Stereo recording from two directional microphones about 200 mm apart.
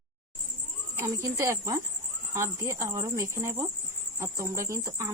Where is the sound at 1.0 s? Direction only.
15° right (ahead or behind).